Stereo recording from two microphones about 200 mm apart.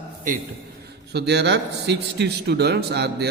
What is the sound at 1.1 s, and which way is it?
A man's voice, 55° right (ahead or behind).